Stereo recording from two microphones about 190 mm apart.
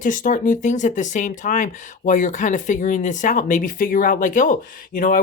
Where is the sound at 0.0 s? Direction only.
45° left (ahead or behind).